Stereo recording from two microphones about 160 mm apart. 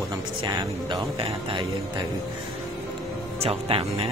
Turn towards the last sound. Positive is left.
turn(degrees=-35)  # may be behind; listen again after turning